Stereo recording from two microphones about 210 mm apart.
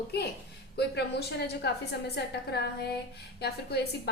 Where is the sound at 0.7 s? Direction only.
50° left (ahead or behind).